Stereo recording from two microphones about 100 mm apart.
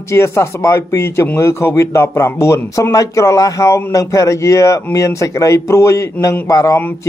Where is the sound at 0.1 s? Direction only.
25° left (ahead or behind).